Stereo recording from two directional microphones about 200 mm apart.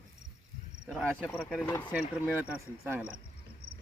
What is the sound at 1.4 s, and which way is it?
Speech, centre (ahead or behind).